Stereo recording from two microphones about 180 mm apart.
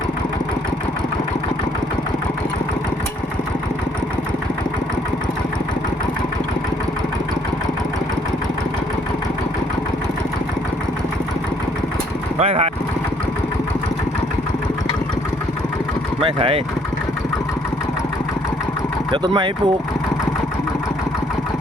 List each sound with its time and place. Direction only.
12.4 s speech: 35° right (ahead or behind)
19.1 s speech: 25° right (ahead or behind)